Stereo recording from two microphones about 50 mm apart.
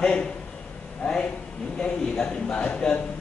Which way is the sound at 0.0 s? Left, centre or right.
Left.